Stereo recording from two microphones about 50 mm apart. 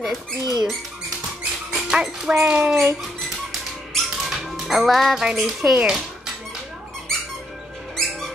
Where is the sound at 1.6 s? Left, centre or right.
Centre.